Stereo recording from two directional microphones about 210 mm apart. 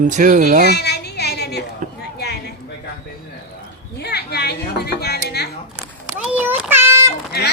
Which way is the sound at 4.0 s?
50° left (ahead or behind).